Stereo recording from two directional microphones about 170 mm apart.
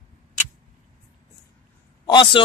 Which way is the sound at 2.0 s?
25° left (ahead or behind).